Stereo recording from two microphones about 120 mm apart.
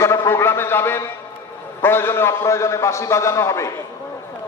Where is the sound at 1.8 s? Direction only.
20° left (ahead or behind).